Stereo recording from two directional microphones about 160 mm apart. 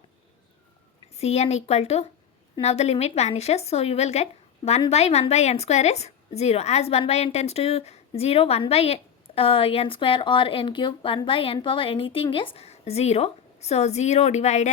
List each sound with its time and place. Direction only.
1.1 s speech: 40° left (ahead or behind)